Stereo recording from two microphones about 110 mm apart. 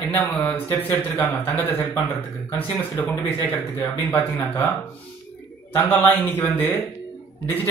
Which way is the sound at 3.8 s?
20° left (ahead or behind).